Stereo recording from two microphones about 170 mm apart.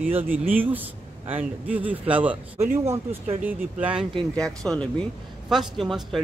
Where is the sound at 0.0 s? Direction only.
10° right (ahead or behind).